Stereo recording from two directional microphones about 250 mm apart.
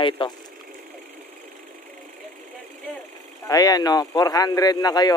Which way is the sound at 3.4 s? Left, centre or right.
Centre.